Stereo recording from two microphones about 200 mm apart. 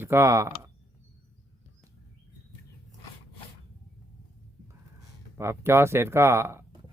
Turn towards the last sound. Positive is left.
turn(degrees=-15)  # may be behind; listen again after turning